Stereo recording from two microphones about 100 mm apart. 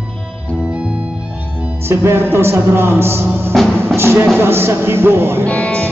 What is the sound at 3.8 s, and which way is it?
Music, 25° right (ahead or behind).